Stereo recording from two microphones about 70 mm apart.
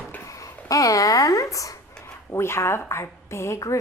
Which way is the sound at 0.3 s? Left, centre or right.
Left.